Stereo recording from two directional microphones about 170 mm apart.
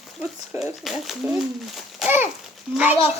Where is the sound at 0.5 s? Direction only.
Centre (ahead or behind).